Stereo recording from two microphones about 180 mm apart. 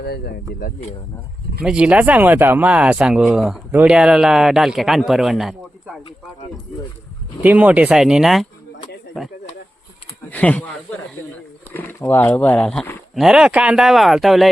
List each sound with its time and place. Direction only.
0.0 s speech: 60° left (ahead or behind)
1.6 s speech: 5° right (ahead or behind)
7.4 s speech: 10° right (ahead or behind)
10.2 s speech: 10° left (ahead or behind)
11.7 s speech: 10° left (ahead or behind)
13.1 s speech: 5° right (ahead or behind)